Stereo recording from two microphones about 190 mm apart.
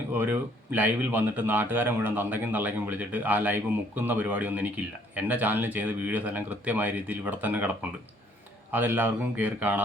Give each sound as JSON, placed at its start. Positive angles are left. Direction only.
{"t": 0.1, "sound": "speech", "side_deg": -10}